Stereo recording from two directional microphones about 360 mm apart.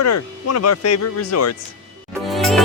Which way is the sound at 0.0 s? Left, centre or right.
Left.